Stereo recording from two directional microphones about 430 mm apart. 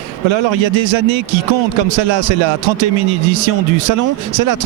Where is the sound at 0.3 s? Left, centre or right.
Right.